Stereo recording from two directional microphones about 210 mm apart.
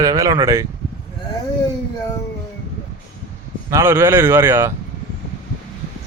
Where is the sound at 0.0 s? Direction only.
15° right (ahead or behind).